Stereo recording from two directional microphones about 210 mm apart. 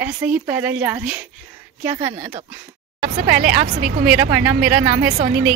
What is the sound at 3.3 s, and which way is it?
Speech, 45° right (ahead or behind).